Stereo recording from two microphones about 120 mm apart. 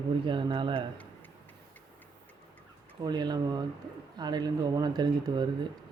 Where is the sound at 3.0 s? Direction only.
35° right (ahead or behind).